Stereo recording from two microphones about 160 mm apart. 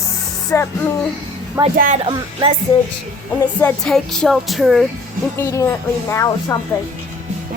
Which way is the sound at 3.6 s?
5° left (ahead or behind).